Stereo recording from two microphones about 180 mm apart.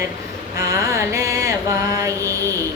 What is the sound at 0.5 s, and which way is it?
Mantra, 15° right (ahead or behind).